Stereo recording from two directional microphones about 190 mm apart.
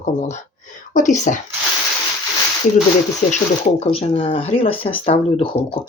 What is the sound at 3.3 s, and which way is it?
Speech, 35° left (ahead or behind).